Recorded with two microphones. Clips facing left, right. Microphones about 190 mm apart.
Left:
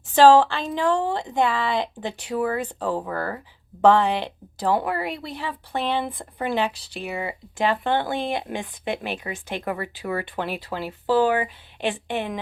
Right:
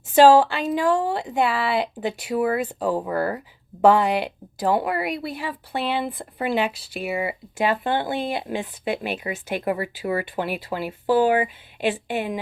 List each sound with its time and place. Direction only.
0.1 s speech: 10° right (ahead or behind)
9.0 s speech: 10° right (ahead or behind)